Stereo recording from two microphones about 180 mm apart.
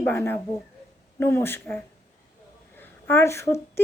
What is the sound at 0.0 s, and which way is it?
Speech, 10° left (ahead or behind).